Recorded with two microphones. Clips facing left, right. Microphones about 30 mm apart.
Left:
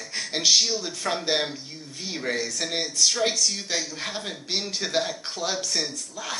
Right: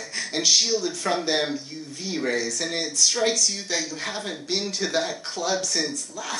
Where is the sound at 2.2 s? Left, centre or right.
Centre.